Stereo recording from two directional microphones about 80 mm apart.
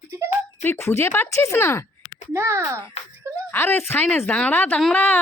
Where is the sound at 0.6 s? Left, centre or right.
Left.